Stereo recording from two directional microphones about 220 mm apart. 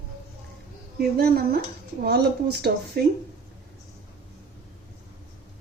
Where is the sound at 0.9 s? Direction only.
45° right (ahead or behind).